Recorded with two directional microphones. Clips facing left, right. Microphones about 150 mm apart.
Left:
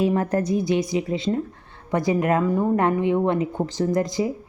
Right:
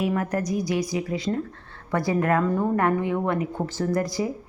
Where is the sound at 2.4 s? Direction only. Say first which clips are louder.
Left 2 dB; 10° left (ahead or behind).